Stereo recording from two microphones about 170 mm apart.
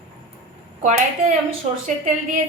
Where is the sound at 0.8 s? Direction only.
45° right (ahead or behind).